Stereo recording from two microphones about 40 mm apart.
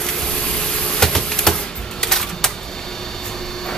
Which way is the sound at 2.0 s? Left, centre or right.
Centre.